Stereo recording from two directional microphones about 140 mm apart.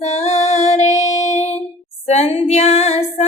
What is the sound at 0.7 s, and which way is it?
Child singing, 55° left (ahead or behind).